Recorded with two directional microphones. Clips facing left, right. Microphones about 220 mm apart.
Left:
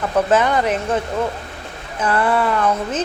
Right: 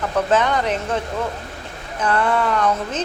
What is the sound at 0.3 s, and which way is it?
Speech, 5° left (ahead or behind).